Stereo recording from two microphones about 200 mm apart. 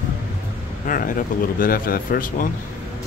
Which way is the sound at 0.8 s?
45° left (ahead or behind).